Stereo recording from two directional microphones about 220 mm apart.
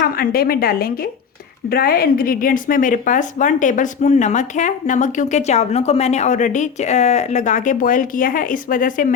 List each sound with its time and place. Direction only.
0.0 s a woman's voice: 45° left (ahead or behind)